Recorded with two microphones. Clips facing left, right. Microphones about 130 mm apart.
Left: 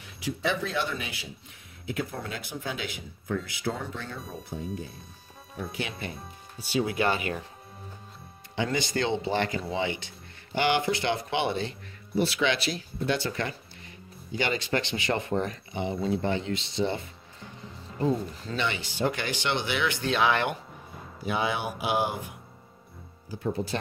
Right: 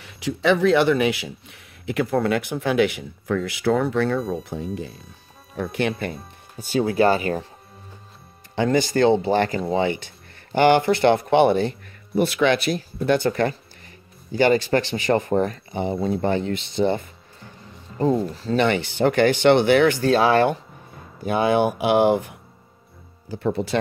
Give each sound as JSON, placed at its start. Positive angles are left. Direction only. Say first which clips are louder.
{"t": 0.0, "sound": "speech", "louder": "right 8 dB", "side_deg": -75}
{"t": 4.2, "sound": "speech", "louder": "right 10 dB", "side_deg": -70}
{"t": 6.8, "sound": "speech", "louder": "right 8 dB", "side_deg": -40}
{"t": 8.5, "sound": "speech", "louder": "right 9 dB", "side_deg": -50}
{"t": 18.6, "sound": "speech", "louder": "right 9 dB", "side_deg": -55}
{"t": 21.2, "sound": "speech", "louder": "right 10 dB", "side_deg": -50}
{"t": 23.3, "sound": "speech", "louder": "right 7 dB", "side_deg": -75}